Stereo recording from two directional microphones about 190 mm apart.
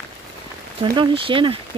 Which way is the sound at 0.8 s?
25° right (ahead or behind).